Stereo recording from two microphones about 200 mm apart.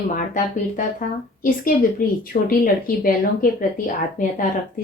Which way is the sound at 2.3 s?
45° left (ahead or behind).